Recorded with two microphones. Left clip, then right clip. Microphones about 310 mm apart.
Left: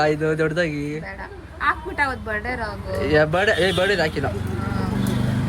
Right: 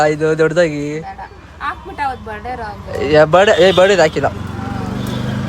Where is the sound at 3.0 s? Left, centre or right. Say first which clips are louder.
Right 9 dB; centre.